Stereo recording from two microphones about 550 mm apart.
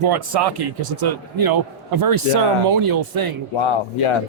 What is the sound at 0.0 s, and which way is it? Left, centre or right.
A man's voice, right.